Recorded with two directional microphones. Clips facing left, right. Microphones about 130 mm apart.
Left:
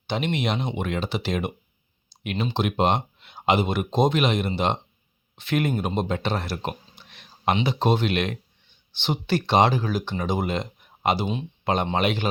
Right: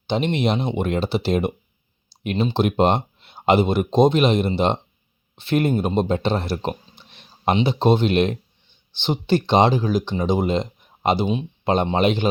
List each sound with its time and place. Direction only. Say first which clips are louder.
0.1 s speech: right 5 dB; 30° right (ahead or behind)